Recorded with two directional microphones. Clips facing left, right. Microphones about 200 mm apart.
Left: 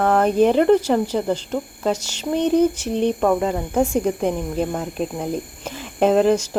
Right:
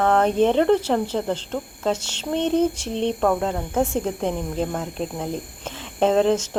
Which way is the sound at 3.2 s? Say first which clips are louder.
Left 2 dB; 5° left (ahead or behind).